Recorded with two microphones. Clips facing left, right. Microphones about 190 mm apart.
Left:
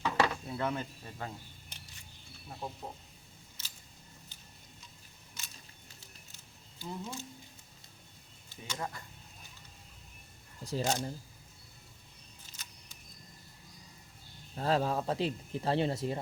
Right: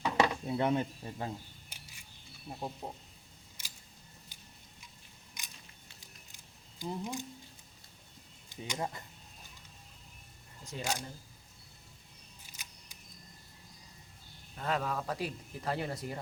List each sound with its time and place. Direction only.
0.0 s speech: 20° right (ahead or behind)
1.7 s camera: 10° right (ahead or behind)
2.8 s speech: 20° right (ahead or behind)
3.6 s a sound: 15° right (ahead or behind)
5.4 s biting: 15° right (ahead or behind)
6.0 s a sound: 15° right (ahead or behind)
8.4 s speech: 15° right (ahead or behind)
10.6 s speech: 35° left (ahead or behind)
12.5 s single-lens reflex camera: 10° right (ahead or behind)
14.5 s speech: 30° left (ahead or behind)